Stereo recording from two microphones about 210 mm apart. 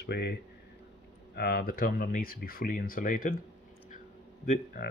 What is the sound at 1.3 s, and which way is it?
Speech, 45° left (ahead or behind).